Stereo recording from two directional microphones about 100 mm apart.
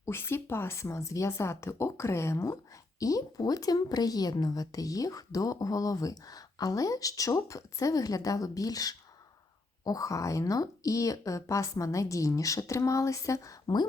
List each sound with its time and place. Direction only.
0.0 s speech: 25° left (ahead or behind)